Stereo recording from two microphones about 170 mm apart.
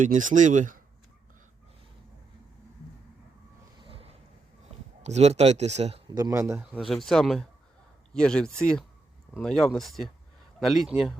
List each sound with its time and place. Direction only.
0.0 s speech: 50° right (ahead or behind)
3.8 s a sound: 35° right (ahead or behind)
5.0 s speech: 40° right (ahead or behind)
6.1 s speech: 25° right (ahead or behind)
6.7 s speech: centre (ahead or behind)